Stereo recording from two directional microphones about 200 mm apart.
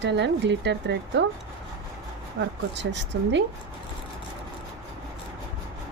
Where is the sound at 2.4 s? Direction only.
65° right (ahead or behind).